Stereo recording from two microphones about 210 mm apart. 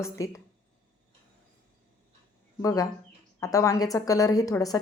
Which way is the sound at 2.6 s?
15° left (ahead or behind).